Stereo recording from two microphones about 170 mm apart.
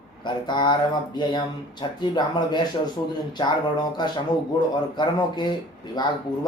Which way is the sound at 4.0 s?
25° left (ahead or behind).